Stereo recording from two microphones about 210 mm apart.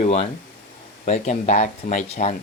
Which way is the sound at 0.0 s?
30° left (ahead or behind).